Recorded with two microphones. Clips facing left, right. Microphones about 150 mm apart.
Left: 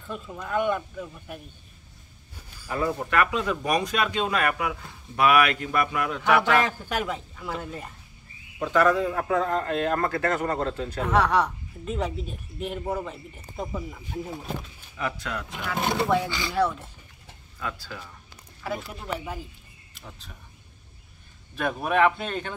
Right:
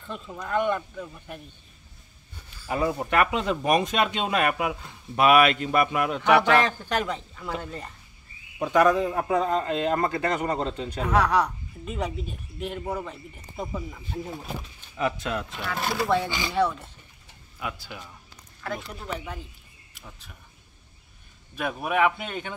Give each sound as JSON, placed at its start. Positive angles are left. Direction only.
{"t": 0.0, "sound": "a woman's voice", "side_deg": 5}
{"t": 2.7, "sound": "speech", "side_deg": -15}
{"t": 6.6, "sound": "a man's voice", "side_deg": 10}
{"t": 8.5, "sound": "speech", "side_deg": -15}
{"t": 11.1, "sound": "a woman's voice", "side_deg": 0}
{"t": 15.0, "sound": "speech", "side_deg": -20}
{"t": 15.5, "sound": "speech", "side_deg": 15}
{"t": 16.3, "sound": "speech", "side_deg": -20}
{"t": 16.5, "sound": "a woman's voice", "side_deg": 5}
{"t": 17.6, "sound": "speech", "side_deg": -15}
{"t": 18.6, "sound": "a woman's voice", "side_deg": 5}
{"t": 21.5, "sound": "speech", "side_deg": -5}